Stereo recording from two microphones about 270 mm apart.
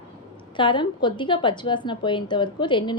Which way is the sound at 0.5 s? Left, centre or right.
Centre.